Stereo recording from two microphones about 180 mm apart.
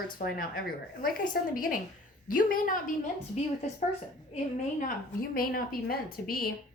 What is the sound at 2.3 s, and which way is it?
Speech, 50° left (ahead or behind).